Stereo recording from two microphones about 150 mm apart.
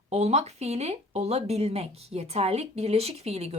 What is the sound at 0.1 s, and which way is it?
Speech, 45° right (ahead or behind).